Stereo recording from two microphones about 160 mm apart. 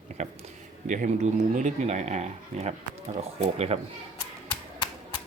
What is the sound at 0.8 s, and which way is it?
Speech, 50° right (ahead or behind).